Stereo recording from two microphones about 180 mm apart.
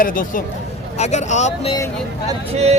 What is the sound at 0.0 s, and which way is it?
Speech, 50° left (ahead or behind).